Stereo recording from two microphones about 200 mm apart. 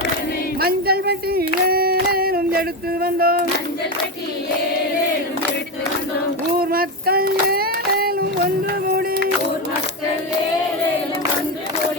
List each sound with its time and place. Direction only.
0.6 s speech: 50° right (ahead or behind)
1.6 s female singing: 50° right (ahead or behind)
6.6 s child singing: 50° right (ahead or behind)